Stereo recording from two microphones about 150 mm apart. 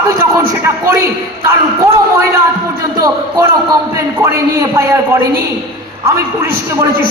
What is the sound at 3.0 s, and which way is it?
Speech, 20° right (ahead or behind).